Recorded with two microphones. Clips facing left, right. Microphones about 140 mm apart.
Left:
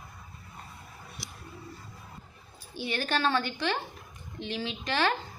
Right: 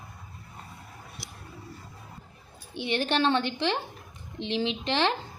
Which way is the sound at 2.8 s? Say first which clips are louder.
Right 4 dB; 25° right (ahead or behind).